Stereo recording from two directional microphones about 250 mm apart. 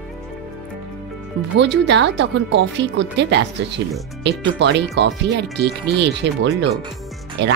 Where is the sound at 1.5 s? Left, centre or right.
Right.